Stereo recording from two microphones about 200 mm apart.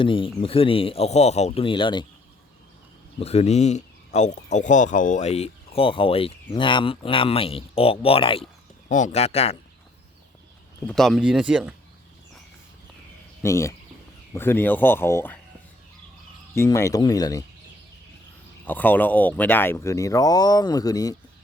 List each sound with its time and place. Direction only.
0.0 s speech: 25° left (ahead or behind)
3.2 s speech: 30° left (ahead or behind)
8.9 s speech: 40° left (ahead or behind)
10.8 s speech: centre (ahead or behind)
13.4 s speech: 15° left (ahead or behind)
16.6 s speech: 15° left (ahead or behind)
18.6 s speech: 10° left (ahead or behind)